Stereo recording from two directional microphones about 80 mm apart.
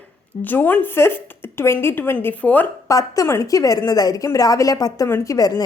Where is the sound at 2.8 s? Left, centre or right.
Left.